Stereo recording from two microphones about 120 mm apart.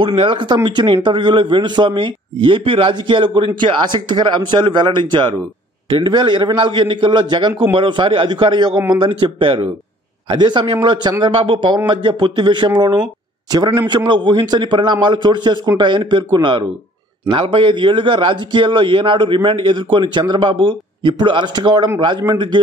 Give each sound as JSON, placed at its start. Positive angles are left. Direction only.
{"t": 0.0, "sound": "a man's voice", "side_deg": -45}